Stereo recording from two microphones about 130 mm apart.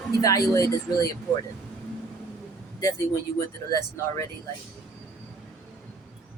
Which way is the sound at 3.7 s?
20° left (ahead or behind).